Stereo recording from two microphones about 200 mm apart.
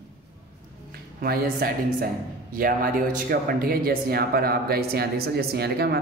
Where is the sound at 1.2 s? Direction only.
50° right (ahead or behind).